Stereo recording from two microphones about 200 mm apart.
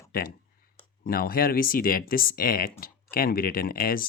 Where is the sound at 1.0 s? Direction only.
50° left (ahead or behind).